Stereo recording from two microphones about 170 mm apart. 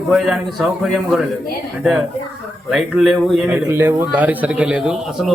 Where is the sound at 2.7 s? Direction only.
Centre (ahead or behind).